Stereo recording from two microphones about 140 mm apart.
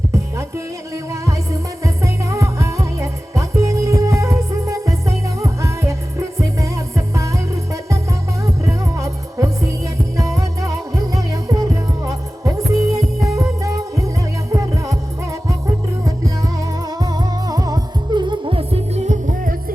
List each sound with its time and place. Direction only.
0.1 s music: 20° right (ahead or behind); by 19.7 s 75° right (ahead or behind)